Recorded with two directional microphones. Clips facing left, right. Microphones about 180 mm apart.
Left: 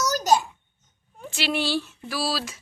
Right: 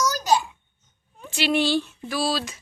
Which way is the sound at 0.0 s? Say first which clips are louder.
Left 1 dB; 45° left (ahead or behind).